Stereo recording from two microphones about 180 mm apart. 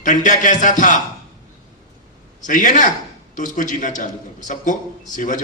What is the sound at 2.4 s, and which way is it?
Speech, 45° left (ahead or behind).